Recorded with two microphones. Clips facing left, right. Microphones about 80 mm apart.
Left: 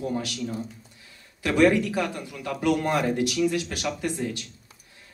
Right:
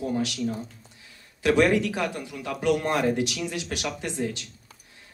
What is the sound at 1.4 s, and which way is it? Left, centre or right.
Speech, right.